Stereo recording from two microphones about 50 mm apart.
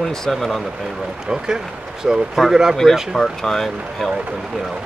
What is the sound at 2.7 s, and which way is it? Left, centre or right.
Speech, centre.